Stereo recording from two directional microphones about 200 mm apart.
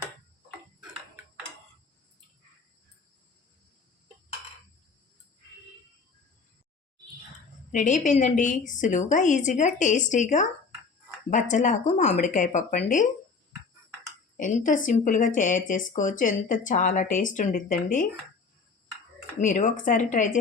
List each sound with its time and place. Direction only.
7.7 s a woman's voice: 40° left (ahead or behind)
14.3 s a woman's voice: 40° left (ahead or behind)
19.4 s a woman's voice: 40° left (ahead or behind)